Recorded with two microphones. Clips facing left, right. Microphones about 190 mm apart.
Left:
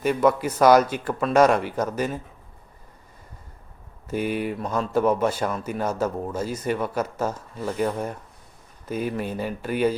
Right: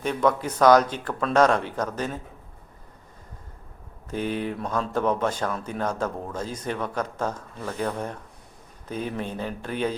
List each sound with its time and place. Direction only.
0.0 s speech: 5° left (ahead or behind)
4.1 s speech: 10° left (ahead or behind)